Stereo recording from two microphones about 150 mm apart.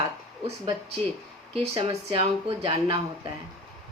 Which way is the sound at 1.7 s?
35° right (ahead or behind).